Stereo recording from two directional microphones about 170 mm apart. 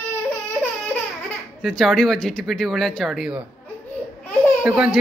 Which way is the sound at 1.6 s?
Centre (ahead or behind).